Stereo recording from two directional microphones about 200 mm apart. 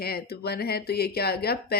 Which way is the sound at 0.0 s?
50° left (ahead or behind).